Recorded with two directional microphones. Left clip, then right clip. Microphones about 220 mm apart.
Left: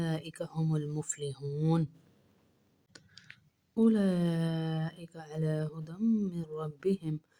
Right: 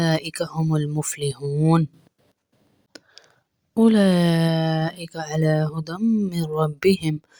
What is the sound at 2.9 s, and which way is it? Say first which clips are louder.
Clicking: right 11 dB; 30° right (ahead or behind).